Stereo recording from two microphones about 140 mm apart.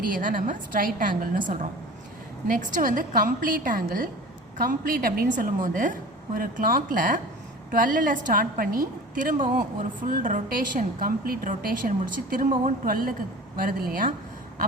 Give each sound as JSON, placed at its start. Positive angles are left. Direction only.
{"t": 0.0, "sound": "a woman's voice", "side_deg": -75}